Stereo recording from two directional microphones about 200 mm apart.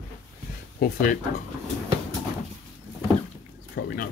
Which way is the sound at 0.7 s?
50° left (ahead or behind).